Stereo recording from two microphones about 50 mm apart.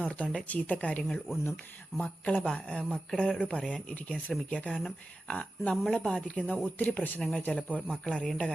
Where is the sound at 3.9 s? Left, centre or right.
Left; by 6.0 s centre.